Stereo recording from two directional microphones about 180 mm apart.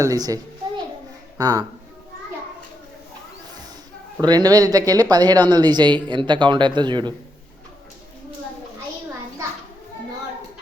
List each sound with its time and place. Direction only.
0.0 s speech: 20° right (ahead or behind)
1.4 s speech: 20° right (ahead or behind)
4.2 s speech: 20° right (ahead or behind)